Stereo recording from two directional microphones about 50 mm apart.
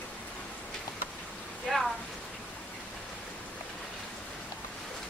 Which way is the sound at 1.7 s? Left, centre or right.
Centre.